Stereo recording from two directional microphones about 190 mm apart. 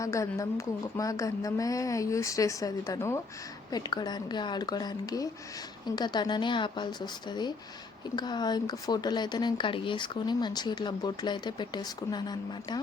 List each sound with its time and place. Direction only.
0.0 s speech: 15° left (ahead or behind)